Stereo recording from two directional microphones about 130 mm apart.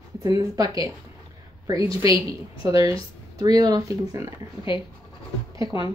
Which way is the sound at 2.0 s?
45° left (ahead or behind).